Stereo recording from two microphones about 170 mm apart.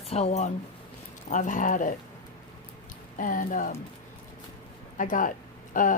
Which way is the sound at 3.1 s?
50° left (ahead or behind).